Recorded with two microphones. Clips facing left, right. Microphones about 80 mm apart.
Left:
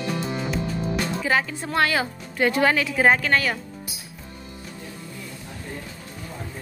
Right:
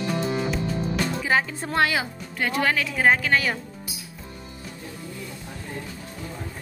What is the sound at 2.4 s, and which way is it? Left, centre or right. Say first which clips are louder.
Speech: left 4 dB; centre.